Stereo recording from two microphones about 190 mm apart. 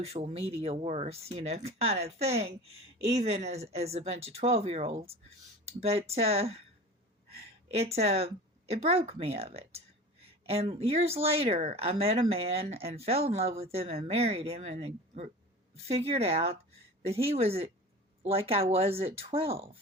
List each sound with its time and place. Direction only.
0.0 s speech: 30° right (ahead or behind)
7.8 s speech: 35° right (ahead or behind)